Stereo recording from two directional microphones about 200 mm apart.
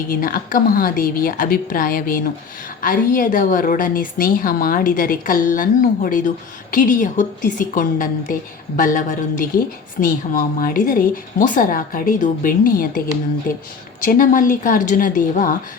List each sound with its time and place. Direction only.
0.1 s a woman's voice: 45° left (ahead or behind)
14.0 s a woman's voice: 40° left (ahead or behind)